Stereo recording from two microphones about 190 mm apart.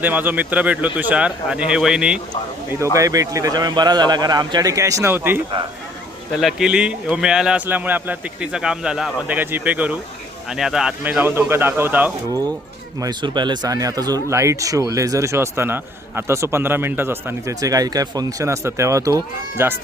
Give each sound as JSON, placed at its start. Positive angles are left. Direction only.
{"t": 0.0, "sound": "speech", "side_deg": -10}
{"t": 2.8, "sound": "speech", "side_deg": -15}
{"t": 6.4, "sound": "a man's voice", "side_deg": -5}
{"t": 13.0, "sound": "speech", "side_deg": -25}